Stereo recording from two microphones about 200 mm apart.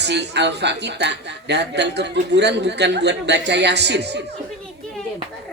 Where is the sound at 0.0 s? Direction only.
55° right (ahead or behind).